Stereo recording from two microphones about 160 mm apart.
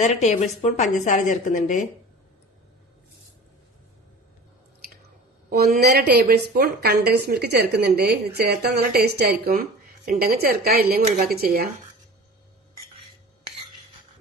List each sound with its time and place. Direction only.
0.0 s a woman's voice: 45° left (ahead or behind)
5.5 s a woman's voice: 70° right (ahead or behind)
10.1 s a woman's voice: 70° right (ahead or behind)